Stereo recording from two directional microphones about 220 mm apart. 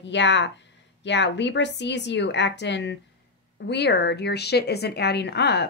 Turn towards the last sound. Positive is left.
turn(degrees=50)  # may be behind; listen again after turning